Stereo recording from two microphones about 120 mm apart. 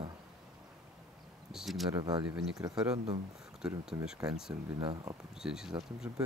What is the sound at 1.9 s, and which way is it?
Speech, 35° right (ahead or behind).